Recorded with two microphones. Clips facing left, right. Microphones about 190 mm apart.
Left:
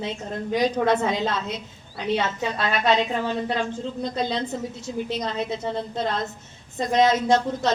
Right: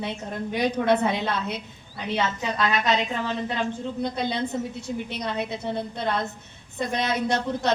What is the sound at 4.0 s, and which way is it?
A woman's voice, 60° right (ahead or behind).